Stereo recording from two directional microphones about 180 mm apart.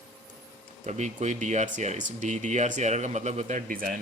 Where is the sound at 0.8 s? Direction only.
40° right (ahead or behind).